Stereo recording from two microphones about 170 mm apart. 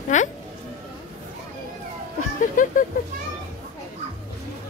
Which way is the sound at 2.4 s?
50° left (ahead or behind).